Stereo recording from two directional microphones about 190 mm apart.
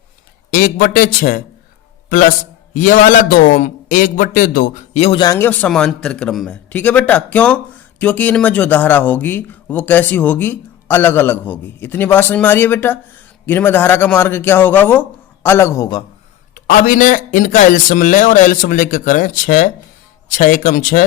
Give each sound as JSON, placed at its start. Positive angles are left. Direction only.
{"t": 0.5, "sound": "a man's voice", "side_deg": 45}
{"t": 5.2, "sound": "a man's voice", "side_deg": 15}
{"t": 16.6, "sound": "a man's voice", "side_deg": 45}